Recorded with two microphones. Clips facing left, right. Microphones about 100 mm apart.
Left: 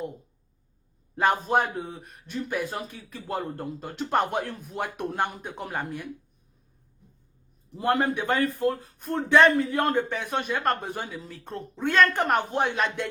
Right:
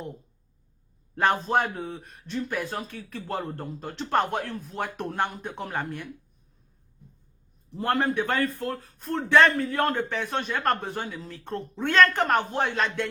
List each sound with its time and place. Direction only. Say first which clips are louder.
1.1 s a man's voice: even; 10° left (ahead or behind)
7.8 s a man's voice: even; 15° left (ahead or behind)
11.3 s a man's voice: right 4 dB; centre (ahead or behind)